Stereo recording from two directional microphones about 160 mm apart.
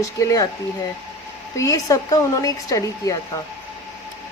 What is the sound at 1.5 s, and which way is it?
Speech, 20° left (ahead or behind).